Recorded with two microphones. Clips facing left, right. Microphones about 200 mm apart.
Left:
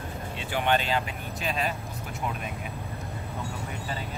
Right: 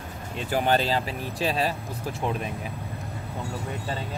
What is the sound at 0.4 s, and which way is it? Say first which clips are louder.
Speech: right 3 dB; 40° right (ahead or behind).